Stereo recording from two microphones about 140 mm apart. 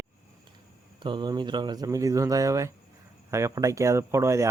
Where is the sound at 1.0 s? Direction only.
35° right (ahead or behind).